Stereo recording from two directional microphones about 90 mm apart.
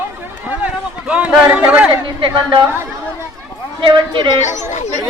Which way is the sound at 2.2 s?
65° right (ahead or behind).